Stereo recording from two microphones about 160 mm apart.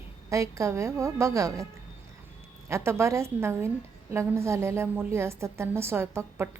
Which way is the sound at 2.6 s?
15° right (ahead or behind).